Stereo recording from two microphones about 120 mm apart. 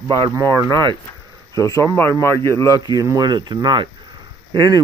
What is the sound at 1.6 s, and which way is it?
A man's voice, 25° left (ahead or behind).